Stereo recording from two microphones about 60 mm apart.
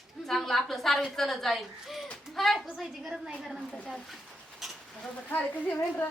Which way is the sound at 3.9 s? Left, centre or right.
Centre.